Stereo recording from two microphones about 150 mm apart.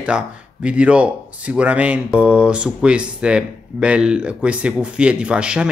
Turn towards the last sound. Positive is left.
turn(degrees=-5)  # may be behind; listen again after turning